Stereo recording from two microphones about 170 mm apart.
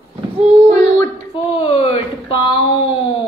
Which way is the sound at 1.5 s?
35° left (ahead or behind).